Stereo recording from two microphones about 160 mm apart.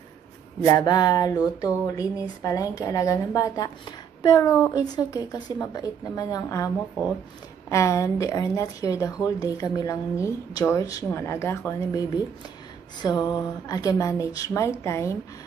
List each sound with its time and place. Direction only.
0.6 s a woman's voice: 20° left (ahead or behind)
7.7 s a woman's voice: 20° left (ahead or behind)
13.0 s a woman's voice: 25° left (ahead or behind)